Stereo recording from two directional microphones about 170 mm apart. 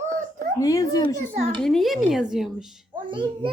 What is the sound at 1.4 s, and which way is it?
Speech, 35° right (ahead or behind).